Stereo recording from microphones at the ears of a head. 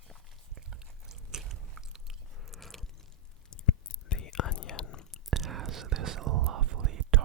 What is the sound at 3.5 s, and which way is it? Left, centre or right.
Whispering, left.